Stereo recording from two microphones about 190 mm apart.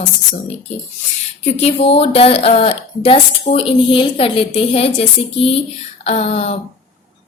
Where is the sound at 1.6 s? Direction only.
30° left (ahead or behind).